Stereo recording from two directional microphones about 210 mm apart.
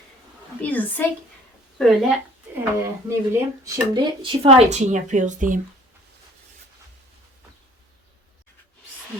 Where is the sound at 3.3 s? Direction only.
15° right (ahead or behind); by 5.6 s 40° right (ahead or behind).